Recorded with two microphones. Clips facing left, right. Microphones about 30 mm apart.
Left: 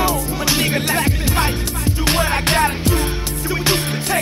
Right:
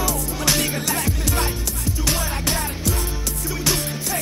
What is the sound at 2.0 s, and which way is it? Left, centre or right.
Music, left.